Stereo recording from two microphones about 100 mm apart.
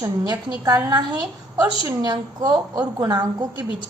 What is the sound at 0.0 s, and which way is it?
Speech, 35° right (ahead or behind).